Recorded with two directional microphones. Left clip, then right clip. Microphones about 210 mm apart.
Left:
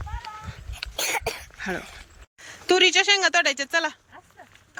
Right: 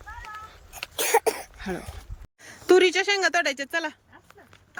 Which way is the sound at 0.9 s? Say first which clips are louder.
Right 5 dB; 35° right (ahead or behind).